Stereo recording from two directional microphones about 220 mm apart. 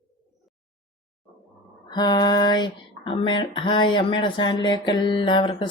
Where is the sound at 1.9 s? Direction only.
20° left (ahead or behind).